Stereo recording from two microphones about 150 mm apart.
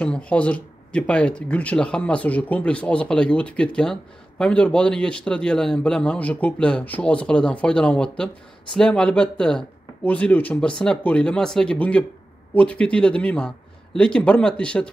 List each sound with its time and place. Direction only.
0.0 s speech: 10° left (ahead or behind)